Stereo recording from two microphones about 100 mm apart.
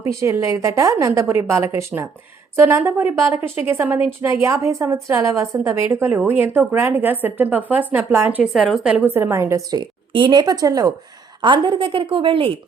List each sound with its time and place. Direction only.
0.2 s a woman's voice: 30° right (ahead or behind)
8.5 s a woman's voice: centre (ahead or behind)
9.0 s a woman's voice: 20° right (ahead or behind)
10.1 s a woman's voice: 50° right (ahead or behind)
11.4 s a woman's voice: 55° right (ahead or behind)